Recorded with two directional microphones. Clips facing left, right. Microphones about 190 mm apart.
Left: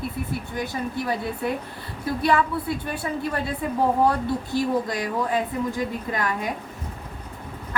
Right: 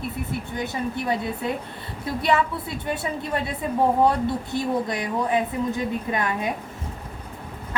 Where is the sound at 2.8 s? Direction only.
20° right (ahead or behind).